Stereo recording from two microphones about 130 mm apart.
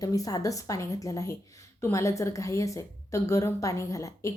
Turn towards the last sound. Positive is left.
turn(degrees=25)  # may be behind; listen again after turning